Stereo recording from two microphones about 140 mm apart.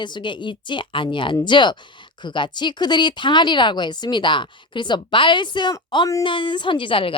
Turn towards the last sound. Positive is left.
turn(degrees=40)  # may be behind; listen again after turning